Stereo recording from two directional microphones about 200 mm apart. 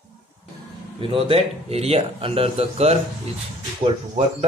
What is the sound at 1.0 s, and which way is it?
Speech, 25° right (ahead or behind).